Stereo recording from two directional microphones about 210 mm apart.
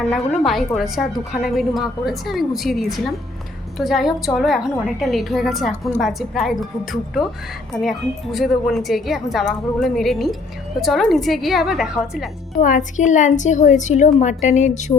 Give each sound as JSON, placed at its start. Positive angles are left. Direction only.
{"t": 0.1, "sound": "a woman's voice", "side_deg": 0}
{"t": 12.6, "sound": "a woman's voice", "side_deg": 35}